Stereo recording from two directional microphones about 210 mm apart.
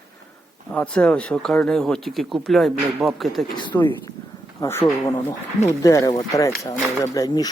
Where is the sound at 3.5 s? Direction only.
20° left (ahead or behind).